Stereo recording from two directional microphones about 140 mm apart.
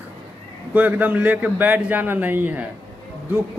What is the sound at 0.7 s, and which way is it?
A man's voice, 10° right (ahead or behind).